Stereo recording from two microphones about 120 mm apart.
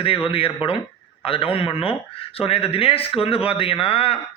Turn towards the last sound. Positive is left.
turn(degrees=50)  # may be behind; listen again after turning